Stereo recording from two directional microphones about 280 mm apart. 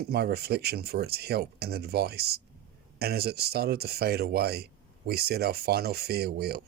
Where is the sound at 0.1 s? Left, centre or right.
Right.